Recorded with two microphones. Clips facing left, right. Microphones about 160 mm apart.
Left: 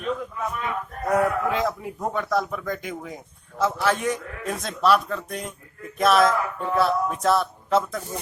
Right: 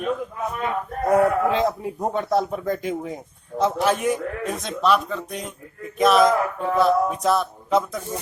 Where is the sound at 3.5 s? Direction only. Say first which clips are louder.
Right 2 dB; 15° right (ahead or behind).